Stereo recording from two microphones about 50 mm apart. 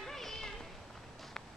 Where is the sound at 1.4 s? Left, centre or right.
Centre.